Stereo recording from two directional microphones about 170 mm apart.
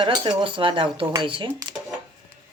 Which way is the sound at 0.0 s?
25° right (ahead or behind).